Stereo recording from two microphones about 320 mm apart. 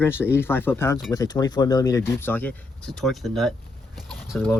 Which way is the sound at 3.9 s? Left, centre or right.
Centre.